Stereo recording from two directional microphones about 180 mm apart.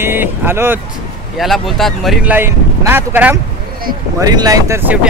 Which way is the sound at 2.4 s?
10° right (ahead or behind).